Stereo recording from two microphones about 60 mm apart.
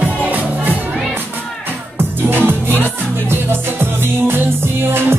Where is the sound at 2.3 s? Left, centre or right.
Right.